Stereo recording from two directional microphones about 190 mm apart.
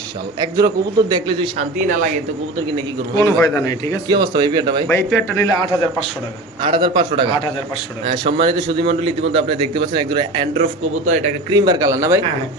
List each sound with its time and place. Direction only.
0.3 s a man's voice: 20° right (ahead or behind)
3.4 s speech: 15° left (ahead or behind)
4.1 s a man's voice: 20° right (ahead or behind)
4.9 s speech: 10° left (ahead or behind)
6.6 s a man's voice: 25° right (ahead or behind)
11.0 s a man's voice: 40° right (ahead or behind)
11.5 s a man's voice: 20° right (ahead or behind)